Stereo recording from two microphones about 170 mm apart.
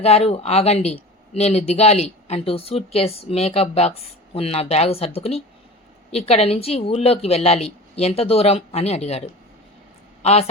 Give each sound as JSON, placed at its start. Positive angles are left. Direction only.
{"t": 0.0, "sound": "speech", "side_deg": 35}
{"t": 10.2, "sound": "speech", "side_deg": 35}